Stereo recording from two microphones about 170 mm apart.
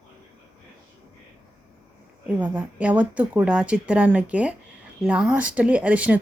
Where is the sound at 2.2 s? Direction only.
10° right (ahead or behind).